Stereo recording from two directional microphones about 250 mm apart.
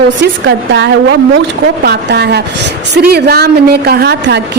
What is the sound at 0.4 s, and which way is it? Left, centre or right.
A woman's voice, right.